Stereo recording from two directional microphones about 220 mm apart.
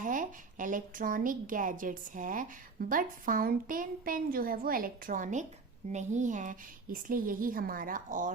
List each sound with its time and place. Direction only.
0.0 s a woman's voice: 35° right (ahead or behind)